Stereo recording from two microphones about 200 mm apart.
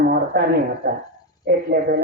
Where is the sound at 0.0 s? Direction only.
50° right (ahead or behind).